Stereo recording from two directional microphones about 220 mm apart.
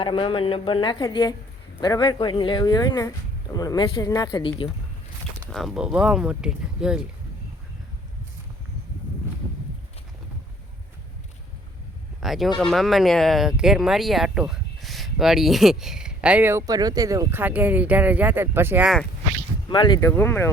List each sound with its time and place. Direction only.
0.0 s a woman's voice: 25° left (ahead or behind)
5.5 s speech: centre (ahead or behind)
12.2 s speech: centre (ahead or behind)
19.6 s speech: 20° left (ahead or behind)